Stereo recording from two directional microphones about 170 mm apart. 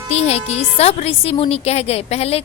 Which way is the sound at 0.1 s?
40° left (ahead or behind).